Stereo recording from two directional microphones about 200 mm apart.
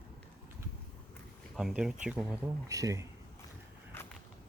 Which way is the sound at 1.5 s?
5° right (ahead or behind).